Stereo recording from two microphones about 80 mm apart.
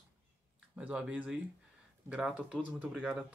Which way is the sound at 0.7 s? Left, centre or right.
Centre.